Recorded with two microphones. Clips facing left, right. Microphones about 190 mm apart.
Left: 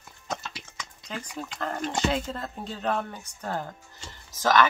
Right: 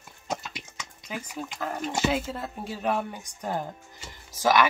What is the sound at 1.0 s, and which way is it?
Speech, 10° right (ahead or behind).